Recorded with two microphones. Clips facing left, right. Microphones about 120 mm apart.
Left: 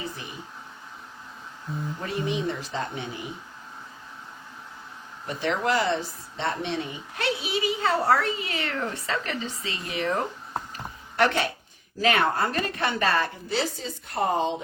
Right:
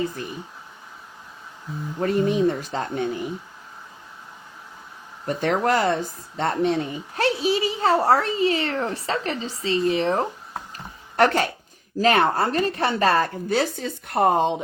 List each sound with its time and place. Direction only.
2.0 s speech: 50° right (ahead or behind)
5.2 s speech: 45° right (ahead or behind); by 10.2 s 30° right (ahead or behind)
11.2 s speech: 40° right (ahead or behind); by 14.5 s 60° right (ahead or behind)